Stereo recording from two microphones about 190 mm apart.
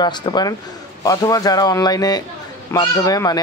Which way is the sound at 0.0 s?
25° left (ahead or behind).